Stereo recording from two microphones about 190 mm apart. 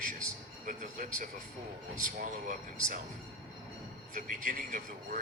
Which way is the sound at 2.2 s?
45° right (ahead or behind).